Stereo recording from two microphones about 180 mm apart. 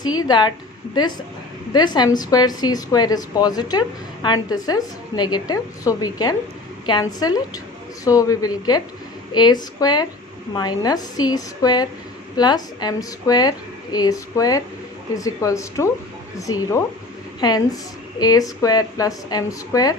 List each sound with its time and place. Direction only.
0.0 s a woman's voice: 20° left (ahead or behind)
1.7 s a woman's voice: 25° left (ahead or behind)
17.4 s a woman's voice: 20° left (ahead or behind)